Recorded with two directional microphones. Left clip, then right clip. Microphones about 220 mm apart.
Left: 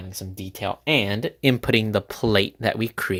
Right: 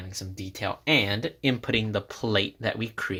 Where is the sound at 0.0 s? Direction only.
35° left (ahead or behind).